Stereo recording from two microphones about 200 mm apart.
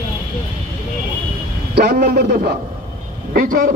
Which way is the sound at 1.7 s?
55° right (ahead or behind).